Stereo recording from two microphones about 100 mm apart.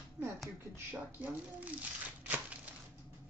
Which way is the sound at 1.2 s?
15° right (ahead or behind).